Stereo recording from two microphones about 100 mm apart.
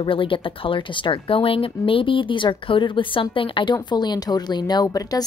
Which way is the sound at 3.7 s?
45° left (ahead or behind).